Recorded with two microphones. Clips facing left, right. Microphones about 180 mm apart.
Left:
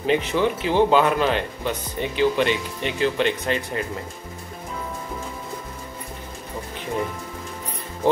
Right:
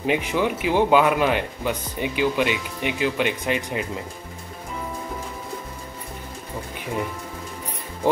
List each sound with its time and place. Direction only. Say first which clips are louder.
0.0 s speech: left 2 dB; 10° right (ahead or behind)